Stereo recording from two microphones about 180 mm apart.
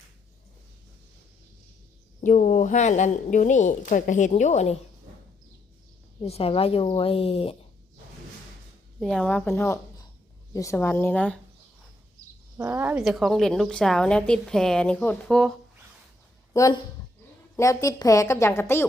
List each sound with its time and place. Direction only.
2.2 s a woman's voice: 45° left (ahead or behind)
6.2 s a woman's voice: 35° left (ahead or behind)
9.0 s a woman's voice: centre (ahead or behind)
12.5 s speech: 10° right (ahead or behind)
13.0 s a woman's voice: centre (ahead or behind)
16.5 s a woman's voice: 20° left (ahead or behind)